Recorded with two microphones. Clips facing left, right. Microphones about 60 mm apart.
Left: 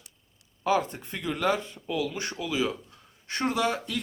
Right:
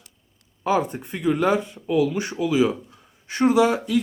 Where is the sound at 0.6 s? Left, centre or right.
Centre.